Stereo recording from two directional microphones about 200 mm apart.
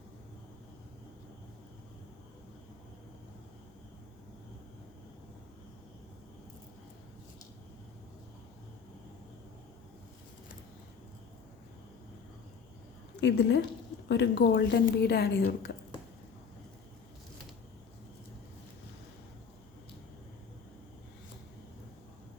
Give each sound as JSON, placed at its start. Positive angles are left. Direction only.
{"t": 13.1, "sound": "a woman's voice", "side_deg": 60}